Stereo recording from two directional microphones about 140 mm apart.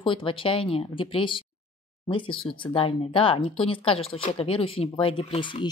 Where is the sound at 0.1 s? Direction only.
40° left (ahead or behind).